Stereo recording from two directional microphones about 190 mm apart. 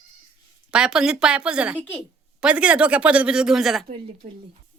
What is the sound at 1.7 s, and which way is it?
Speech, 10° left (ahead or behind).